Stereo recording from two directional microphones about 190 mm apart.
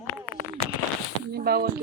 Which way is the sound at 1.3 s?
55° right (ahead or behind).